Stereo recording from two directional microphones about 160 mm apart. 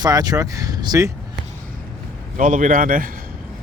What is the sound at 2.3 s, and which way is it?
Speech, 55° right (ahead or behind).